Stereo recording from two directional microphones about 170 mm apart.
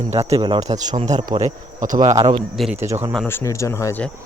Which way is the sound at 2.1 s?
25° right (ahead or behind).